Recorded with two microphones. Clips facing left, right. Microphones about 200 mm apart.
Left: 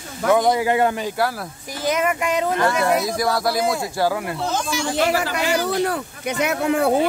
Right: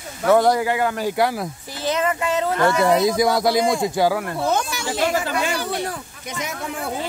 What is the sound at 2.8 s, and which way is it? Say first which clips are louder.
Speech: right 3 dB; 25° right (ahead or behind).